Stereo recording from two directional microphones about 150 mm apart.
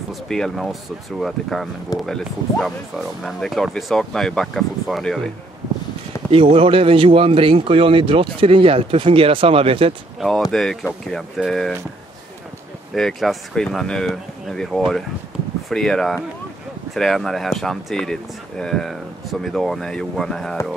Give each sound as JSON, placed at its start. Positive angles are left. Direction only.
{"t": 0.3, "sound": "speech", "side_deg": 0}
{"t": 6.3, "sound": "speech", "side_deg": -40}
{"t": 10.2, "sound": "speech", "side_deg": 0}
{"t": 12.9, "sound": "speech", "side_deg": 0}